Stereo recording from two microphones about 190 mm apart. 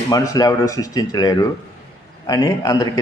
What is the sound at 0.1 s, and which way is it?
A man's voice, 20° left (ahead or behind).